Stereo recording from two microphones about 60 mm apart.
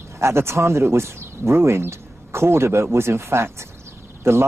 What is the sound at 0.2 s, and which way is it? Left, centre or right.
Speech, right.